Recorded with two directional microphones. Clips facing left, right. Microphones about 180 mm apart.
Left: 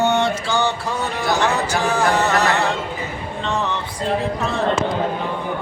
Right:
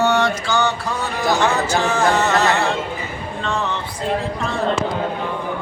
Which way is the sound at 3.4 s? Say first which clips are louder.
Even; 20° left (ahead or behind).